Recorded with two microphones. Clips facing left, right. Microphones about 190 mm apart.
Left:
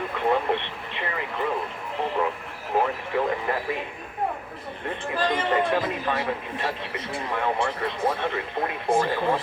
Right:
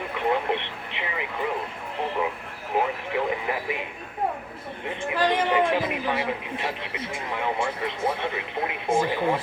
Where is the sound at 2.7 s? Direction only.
15° right (ahead or behind).